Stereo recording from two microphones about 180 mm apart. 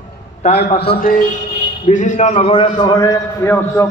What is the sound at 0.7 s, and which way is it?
Speech, 55° left (ahead or behind).